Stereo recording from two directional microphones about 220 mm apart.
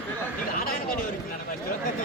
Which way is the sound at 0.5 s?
40° left (ahead or behind).